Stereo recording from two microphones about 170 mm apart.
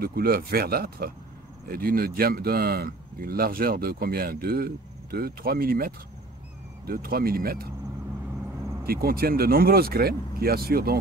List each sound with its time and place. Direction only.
0.0 s speech: 65° right (ahead or behind)
8.8 s speech: 65° right (ahead or behind)